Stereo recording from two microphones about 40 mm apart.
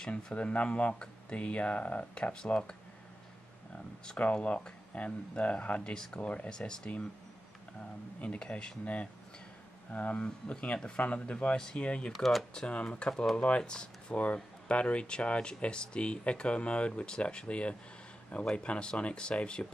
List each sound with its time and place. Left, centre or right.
0.1 s speech: left
2.3 s speech: left
4.2 s speech: left
6.5 s speech: left
8.4 s speech: left
11.5 s speech: centre
11.8 s speech: left
12.1 s speech: centre
12.5 s speech: left
14.2 s speech: left